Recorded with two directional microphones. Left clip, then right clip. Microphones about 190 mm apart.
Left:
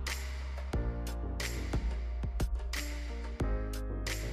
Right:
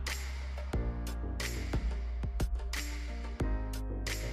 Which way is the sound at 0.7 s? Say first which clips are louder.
Left 1 dB; centre (ahead or behind).